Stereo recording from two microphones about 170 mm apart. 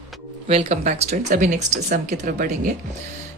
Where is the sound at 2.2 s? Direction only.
55° right (ahead or behind).